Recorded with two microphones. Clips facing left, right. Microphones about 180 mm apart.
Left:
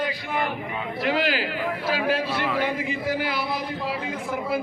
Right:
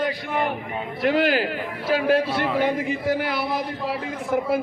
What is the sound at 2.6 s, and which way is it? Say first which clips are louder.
Speech: right 4 dB; 45° right (ahead or behind).